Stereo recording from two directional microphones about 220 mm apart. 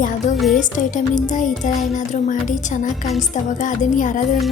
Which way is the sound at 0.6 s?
35° left (ahead or behind).